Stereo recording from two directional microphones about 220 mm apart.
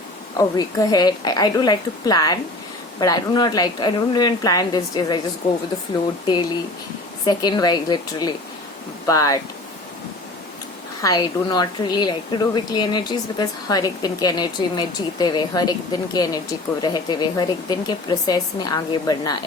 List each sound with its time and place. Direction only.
0.3 s a woman's voice: 15° left (ahead or behind)
7.3 s a woman's voice: 20° left (ahead or behind)
11.0 s speech: 20° left (ahead or behind)